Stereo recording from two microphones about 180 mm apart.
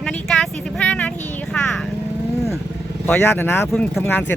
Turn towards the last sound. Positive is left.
turn(degrees=10)  # may be behind; listen again after turning